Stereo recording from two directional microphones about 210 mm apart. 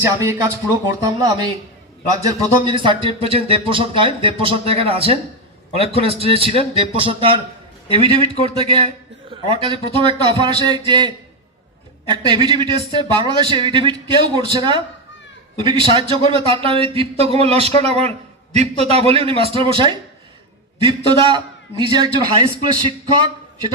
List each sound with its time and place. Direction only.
0.2 s a man's voice: 15° right (ahead or behind)